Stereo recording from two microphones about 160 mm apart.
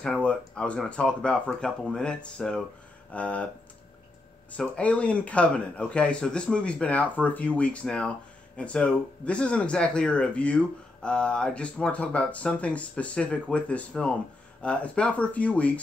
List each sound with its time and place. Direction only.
0.0 s speech: 5° left (ahead or behind)
4.5 s speech: 10° left (ahead or behind)